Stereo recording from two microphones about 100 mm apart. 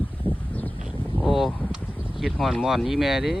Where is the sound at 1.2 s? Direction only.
Centre (ahead or behind).